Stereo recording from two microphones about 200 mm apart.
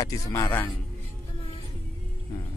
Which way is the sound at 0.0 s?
15° left (ahead or behind).